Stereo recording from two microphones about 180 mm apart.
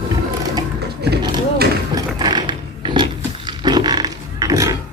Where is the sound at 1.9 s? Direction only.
25° right (ahead or behind).